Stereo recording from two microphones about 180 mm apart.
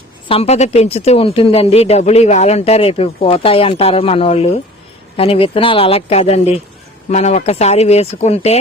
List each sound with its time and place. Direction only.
0.3 s speech: 35° left (ahead or behind)